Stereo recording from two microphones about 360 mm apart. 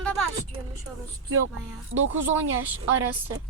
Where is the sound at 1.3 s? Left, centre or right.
Right.